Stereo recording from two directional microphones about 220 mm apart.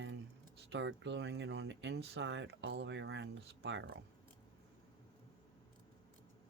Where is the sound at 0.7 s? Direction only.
55° right (ahead or behind).